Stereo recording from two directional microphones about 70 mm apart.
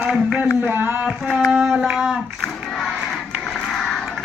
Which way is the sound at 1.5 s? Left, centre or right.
Centre.